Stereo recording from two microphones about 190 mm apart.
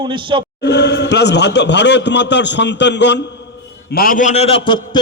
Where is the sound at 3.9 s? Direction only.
50° left (ahead or behind); by 4.8 s 25° left (ahead or behind).